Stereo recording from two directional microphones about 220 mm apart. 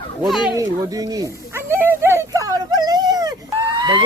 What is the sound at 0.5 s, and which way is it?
Speech, 15° right (ahead or behind).